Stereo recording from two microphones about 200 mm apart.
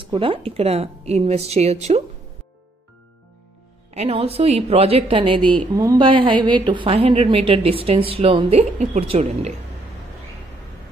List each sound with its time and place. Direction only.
0.0 s a woman's voice: 25° right (ahead or behind)
3.9 s a woman's voice: 30° right (ahead or behind)